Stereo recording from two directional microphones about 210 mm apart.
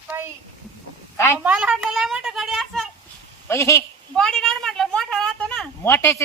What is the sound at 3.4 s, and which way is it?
A woman's voice, 10° left (ahead or behind).